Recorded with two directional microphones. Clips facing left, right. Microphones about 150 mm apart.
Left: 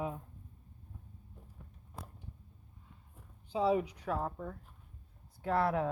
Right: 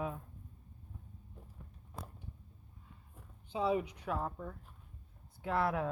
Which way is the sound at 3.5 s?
35° left (ahead or behind).